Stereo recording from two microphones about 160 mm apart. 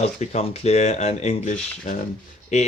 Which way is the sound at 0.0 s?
40° left (ahead or behind).